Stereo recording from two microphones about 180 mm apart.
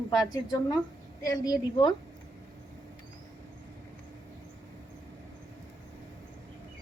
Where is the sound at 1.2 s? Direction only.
20° left (ahead or behind).